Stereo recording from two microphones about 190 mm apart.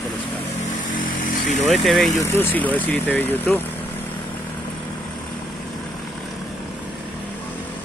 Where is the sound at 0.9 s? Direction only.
45° left (ahead or behind).